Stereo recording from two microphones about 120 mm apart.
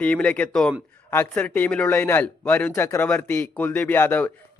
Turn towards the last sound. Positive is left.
turn(degrees=15)  # may be behind; listen again after turning